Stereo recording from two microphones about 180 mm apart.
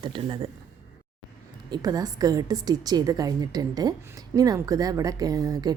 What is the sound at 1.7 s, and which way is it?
A woman's voice, 20° right (ahead or behind).